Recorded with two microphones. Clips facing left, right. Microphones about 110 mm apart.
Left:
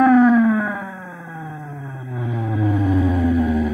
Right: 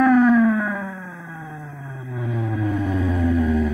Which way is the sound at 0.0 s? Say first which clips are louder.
Left 2 dB; 10° left (ahead or behind).